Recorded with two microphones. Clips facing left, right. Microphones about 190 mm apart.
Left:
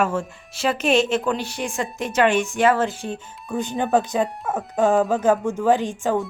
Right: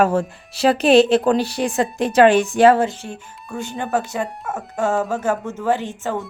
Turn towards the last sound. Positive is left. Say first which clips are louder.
# left 2 dB
turn(degrees=15)  # may be behind; listen again after turning